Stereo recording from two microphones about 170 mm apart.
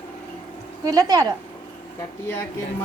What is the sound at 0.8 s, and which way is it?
Speech, 20° right (ahead or behind).